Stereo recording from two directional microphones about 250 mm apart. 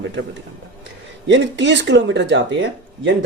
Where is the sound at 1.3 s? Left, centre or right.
Right.